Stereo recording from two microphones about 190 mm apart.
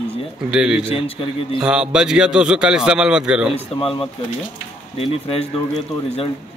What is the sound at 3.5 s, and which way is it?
Speech, 30° left (ahead or behind).